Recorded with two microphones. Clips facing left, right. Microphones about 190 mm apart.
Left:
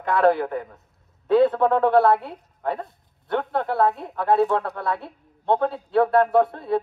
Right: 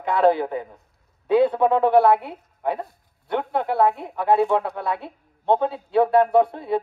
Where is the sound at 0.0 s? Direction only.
Centre (ahead or behind).